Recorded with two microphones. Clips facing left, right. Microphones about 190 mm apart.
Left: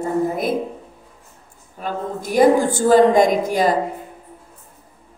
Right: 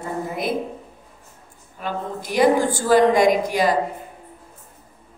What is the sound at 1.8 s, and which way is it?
A woman's voice, 45° left (ahead or behind).